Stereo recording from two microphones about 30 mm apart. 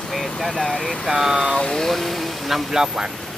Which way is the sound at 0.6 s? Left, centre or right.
Centre.